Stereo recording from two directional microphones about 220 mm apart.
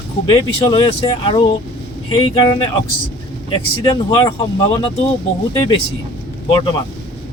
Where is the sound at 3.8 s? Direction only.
25° left (ahead or behind).